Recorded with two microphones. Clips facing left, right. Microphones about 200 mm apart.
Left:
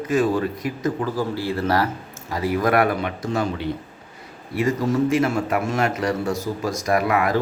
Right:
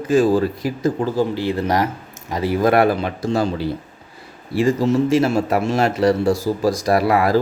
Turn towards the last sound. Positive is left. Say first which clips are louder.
# right 4 dB
turn(degrees=-35)  # may be behind; listen again after turning